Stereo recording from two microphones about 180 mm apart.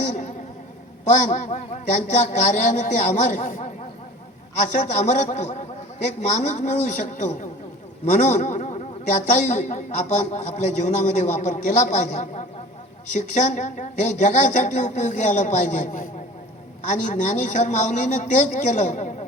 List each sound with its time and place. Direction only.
0.0 s a sound: 40° left (ahead or behind)
1.0 s a man's voice: 45° left (ahead or behind)
4.7 s a man's voice: 40° left (ahead or behind)